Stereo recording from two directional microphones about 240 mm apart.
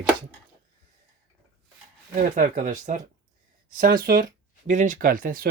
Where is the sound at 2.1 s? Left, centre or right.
Right.